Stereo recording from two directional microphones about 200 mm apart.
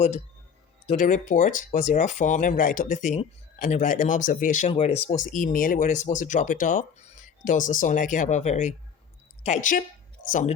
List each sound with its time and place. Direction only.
0.9 s speech: 40° left (ahead or behind)